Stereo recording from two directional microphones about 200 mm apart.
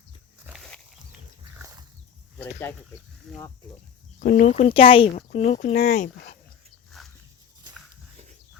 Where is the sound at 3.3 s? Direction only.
Centre (ahead or behind).